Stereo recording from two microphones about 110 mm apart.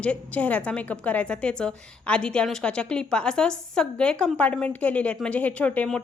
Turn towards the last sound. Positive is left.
turn(degrees=15)  # may be behind; listen again after turning